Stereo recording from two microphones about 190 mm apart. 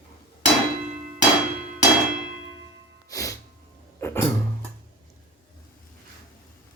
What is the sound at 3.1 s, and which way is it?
Music, 15° left (ahead or behind).